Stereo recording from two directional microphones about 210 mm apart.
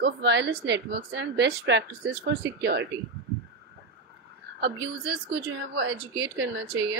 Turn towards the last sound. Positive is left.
turn(degrees=-50)  # may be behind; listen again after turning